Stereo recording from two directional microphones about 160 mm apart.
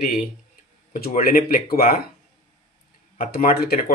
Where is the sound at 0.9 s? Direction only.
65° left (ahead or behind).